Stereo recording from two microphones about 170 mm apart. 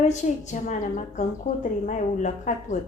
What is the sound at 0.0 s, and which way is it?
A woman's voice, 45° left (ahead or behind).